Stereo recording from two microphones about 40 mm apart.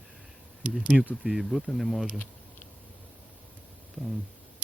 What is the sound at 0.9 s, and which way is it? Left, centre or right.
Speech, right.